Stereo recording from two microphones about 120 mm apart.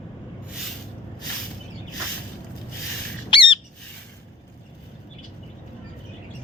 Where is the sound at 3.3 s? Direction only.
45° left (ahead or behind).